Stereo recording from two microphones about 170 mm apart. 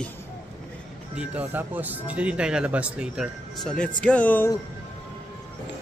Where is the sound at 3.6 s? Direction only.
5° left (ahead or behind).